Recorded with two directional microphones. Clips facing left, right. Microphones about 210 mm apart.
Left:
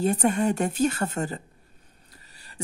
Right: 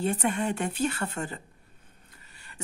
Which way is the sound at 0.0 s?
40° left (ahead or behind).